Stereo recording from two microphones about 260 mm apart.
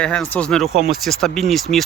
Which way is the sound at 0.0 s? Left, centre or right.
Centre.